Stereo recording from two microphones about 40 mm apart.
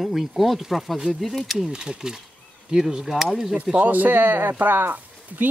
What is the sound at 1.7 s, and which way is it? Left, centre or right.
Speech, right.